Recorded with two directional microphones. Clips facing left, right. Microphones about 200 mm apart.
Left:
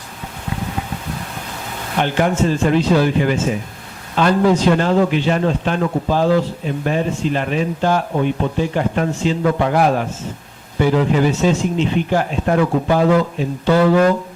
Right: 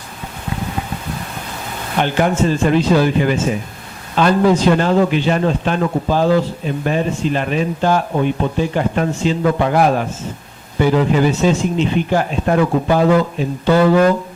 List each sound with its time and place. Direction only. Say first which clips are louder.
1.9 s a man's voice: right 1 dB; 15° right (ahead or behind)
13.7 s speech: right 1 dB; 40° right (ahead or behind)